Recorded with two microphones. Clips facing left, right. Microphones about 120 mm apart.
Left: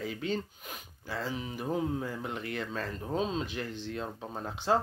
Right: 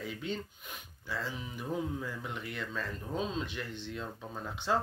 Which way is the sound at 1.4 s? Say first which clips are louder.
Left 4 dB; 60° left (ahead or behind).